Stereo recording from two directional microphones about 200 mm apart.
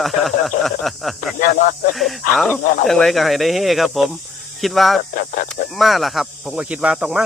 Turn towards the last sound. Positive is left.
turn(degrees=-5)  # may be behind; listen again after turning